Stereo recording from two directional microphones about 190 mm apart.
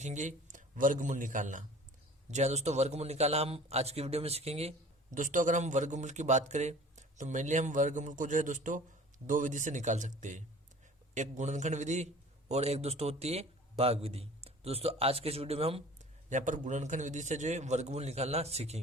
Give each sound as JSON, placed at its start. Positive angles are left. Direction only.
{"t": 0.0, "sound": "a man's voice", "side_deg": -40}
{"t": 5.1, "sound": "a man's voice", "side_deg": -45}